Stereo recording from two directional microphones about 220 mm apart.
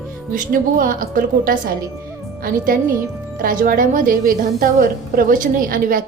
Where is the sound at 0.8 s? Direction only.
40° right (ahead or behind).